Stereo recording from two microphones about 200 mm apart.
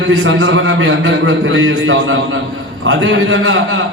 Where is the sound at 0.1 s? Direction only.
70° right (ahead or behind).